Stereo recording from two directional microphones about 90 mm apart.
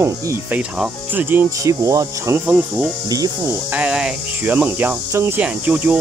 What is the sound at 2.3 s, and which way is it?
Speech, 20° right (ahead or behind).